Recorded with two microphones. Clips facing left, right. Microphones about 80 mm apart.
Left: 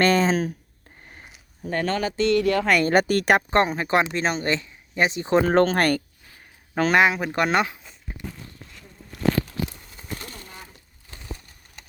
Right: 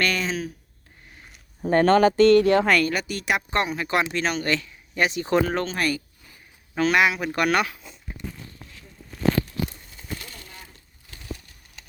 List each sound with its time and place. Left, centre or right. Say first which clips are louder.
0.0 s speech: left 6 dB; left
1.6 s speech: right 8 dB; right
2.4 s speech: right 3 dB; right
2.8 s speech: left 7 dB; left
3.5 s speech: left 4 dB; left
5.5 s speech: left 7 dB; left
6.7 s speech: left 2 dB; left
10.3 s a sound: left 3 dB; left